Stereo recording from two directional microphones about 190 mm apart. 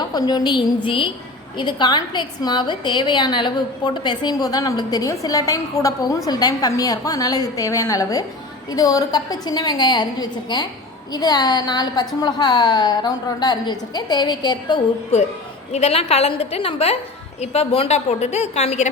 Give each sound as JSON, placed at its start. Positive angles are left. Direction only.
{"t": 0.1, "sound": "a woman's voice", "side_deg": 20}